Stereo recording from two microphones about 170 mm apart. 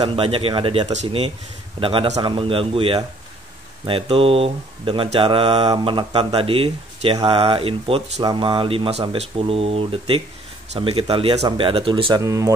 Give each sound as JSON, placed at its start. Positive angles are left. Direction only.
{"t": 0.0, "sound": "speech", "side_deg": -30}